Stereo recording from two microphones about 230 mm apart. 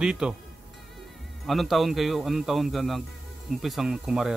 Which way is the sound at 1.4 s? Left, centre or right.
Centre.